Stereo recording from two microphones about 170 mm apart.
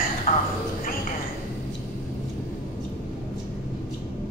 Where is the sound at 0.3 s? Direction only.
35° left (ahead or behind).